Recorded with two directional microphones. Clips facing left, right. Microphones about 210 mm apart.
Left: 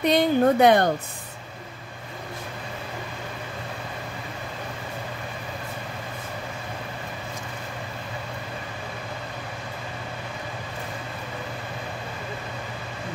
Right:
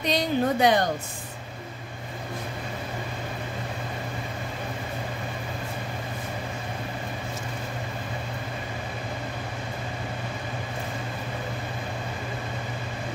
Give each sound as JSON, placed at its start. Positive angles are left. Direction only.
{"t": 0.0, "sound": "speech", "side_deg": 55}